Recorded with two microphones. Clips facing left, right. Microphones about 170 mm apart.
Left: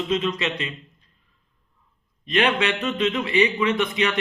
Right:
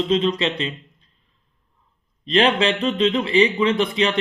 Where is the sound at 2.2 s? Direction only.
30° right (ahead or behind).